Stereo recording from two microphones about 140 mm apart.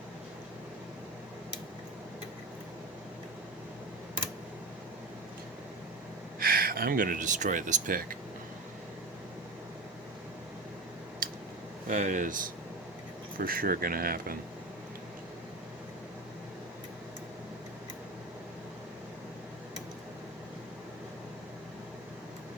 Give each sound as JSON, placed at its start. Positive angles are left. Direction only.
{"t": 6.4, "sound": "speech", "side_deg": -90}
{"t": 11.2, "sound": "a sound", "side_deg": -80}
{"t": 11.9, "sound": "speech", "side_deg": -65}
{"t": 13.4, "sound": "speech", "side_deg": -90}